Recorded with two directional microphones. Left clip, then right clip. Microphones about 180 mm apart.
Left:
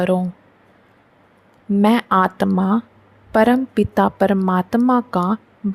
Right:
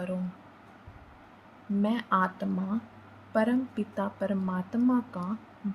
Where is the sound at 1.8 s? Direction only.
60° left (ahead or behind).